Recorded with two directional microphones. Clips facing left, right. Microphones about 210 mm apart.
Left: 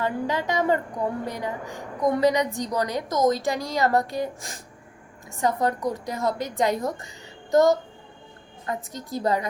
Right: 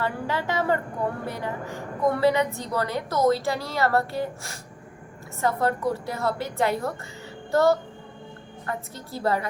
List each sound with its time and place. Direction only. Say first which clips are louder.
0.0 s a woman's voice: left 2 dB; 15° left (ahead or behind)